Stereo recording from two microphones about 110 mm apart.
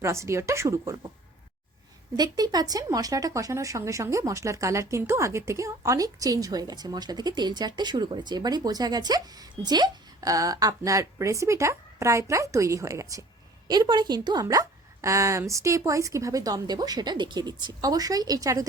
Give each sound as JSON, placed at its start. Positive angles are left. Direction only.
{"t": 0.0, "sound": "a woman's voice", "side_deg": -25}
{"t": 2.1, "sound": "speech", "side_deg": -40}